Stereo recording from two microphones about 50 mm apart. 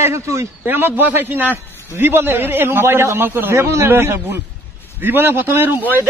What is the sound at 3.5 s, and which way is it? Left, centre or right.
Speech, right.